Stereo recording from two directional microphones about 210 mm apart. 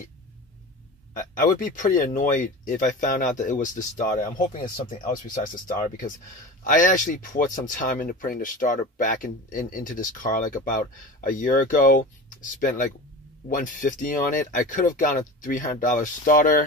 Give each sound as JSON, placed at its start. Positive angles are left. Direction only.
{"t": 1.1, "sound": "speech", "side_deg": 40}